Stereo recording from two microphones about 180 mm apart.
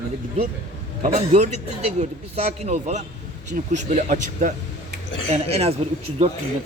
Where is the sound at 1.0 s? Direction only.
45° right (ahead or behind).